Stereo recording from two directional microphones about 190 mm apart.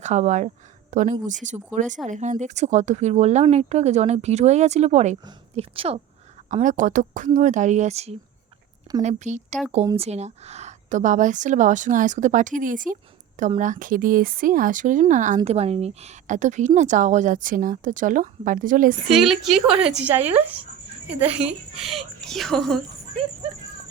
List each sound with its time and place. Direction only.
0.0 s a woman's voice: 40° right (ahead or behind)
6.5 s a woman's voice: 40° right (ahead or behind)
19.1 s a woman's voice: centre (ahead or behind)